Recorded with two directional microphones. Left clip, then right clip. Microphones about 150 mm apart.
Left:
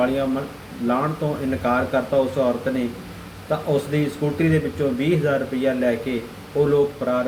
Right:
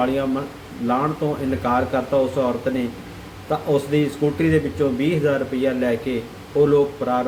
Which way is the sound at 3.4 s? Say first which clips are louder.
Right 1 dB; 10° right (ahead or behind).